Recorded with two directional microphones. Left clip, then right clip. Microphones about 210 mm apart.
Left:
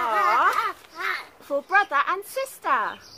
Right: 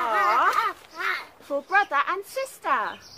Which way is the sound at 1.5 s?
20° left (ahead or behind).